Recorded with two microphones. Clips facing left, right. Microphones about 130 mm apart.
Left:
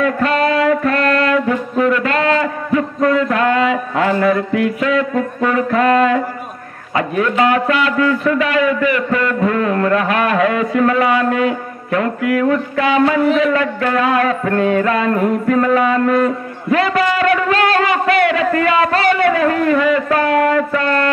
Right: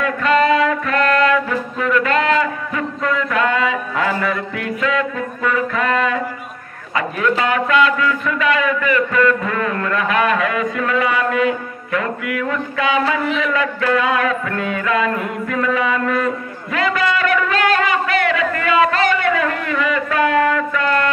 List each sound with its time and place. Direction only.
0.0 s music: 40° left (ahead or behind)
3.7 s a man's voice: 35° left (ahead or behind)
16.7 s a sound: 35° left (ahead or behind)